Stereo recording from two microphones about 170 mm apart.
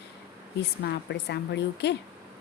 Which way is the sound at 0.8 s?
80° left.